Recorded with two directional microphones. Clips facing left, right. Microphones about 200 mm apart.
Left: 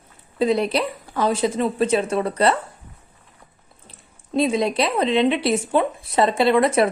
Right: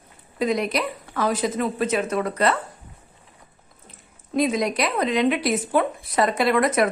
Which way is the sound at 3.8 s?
30° left (ahead or behind).